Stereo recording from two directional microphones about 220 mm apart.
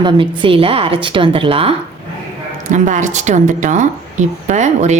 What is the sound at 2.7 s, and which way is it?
A woman's voice, 35° right (ahead or behind).